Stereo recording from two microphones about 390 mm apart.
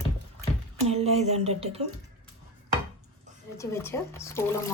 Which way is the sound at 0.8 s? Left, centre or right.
Centre.